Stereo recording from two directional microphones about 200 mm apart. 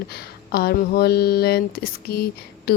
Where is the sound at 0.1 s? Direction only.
50° left (ahead or behind).